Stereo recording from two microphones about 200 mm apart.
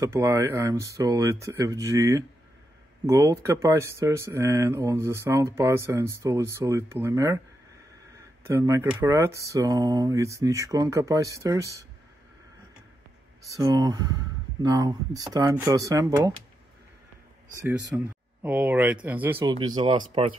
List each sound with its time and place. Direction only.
0.0 s speech: 15° right (ahead or behind)
8.5 s speech: 15° right (ahead or behind)
13.5 s speech: 15° right (ahead or behind)
17.6 s speech: 10° right (ahead or behind)
19.4 s speech: 20° right (ahead or behind)